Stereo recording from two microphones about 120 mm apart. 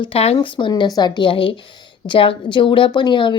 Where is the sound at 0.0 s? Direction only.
55° left (ahead or behind).